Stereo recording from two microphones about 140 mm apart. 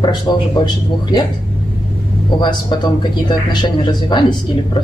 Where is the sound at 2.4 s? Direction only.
30° left (ahead or behind).